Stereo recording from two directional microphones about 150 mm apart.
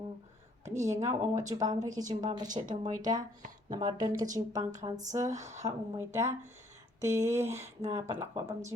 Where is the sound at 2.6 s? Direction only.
40° right (ahead or behind).